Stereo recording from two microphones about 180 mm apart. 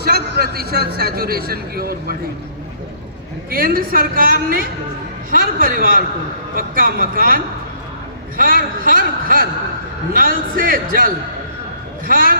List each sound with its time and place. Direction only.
0.0 s a man's voice: 60° right (ahead or behind)
3.5 s a man's voice: 55° right (ahead or behind)